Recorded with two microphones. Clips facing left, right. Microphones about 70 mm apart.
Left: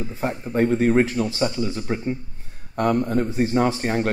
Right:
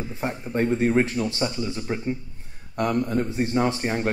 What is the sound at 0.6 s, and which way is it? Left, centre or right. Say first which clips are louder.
A man's voice: left 3 dB; left.